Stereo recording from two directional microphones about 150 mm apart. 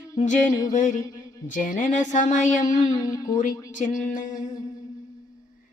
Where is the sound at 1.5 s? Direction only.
60° left (ahead or behind).